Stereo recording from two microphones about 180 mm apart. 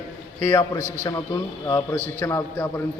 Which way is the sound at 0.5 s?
15° left (ahead or behind).